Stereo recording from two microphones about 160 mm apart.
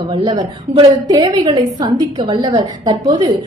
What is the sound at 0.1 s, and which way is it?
A woman's voice, 30° right (ahead or behind).